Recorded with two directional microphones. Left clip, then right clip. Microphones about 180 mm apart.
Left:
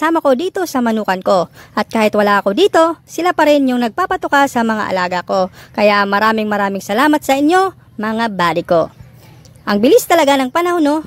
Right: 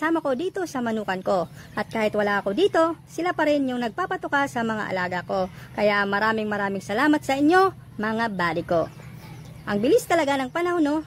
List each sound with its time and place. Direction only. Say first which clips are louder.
0.0 s speech: left 11 dB; 40° left (ahead or behind)